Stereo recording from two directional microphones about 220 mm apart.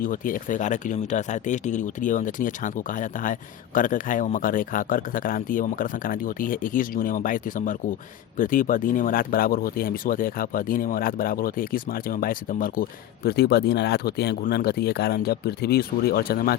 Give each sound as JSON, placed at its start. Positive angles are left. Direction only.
{"t": 0.0, "sound": "speech", "side_deg": 40}